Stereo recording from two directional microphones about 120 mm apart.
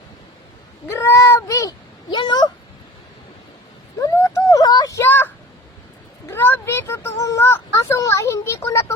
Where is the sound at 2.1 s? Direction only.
35° left (ahead or behind).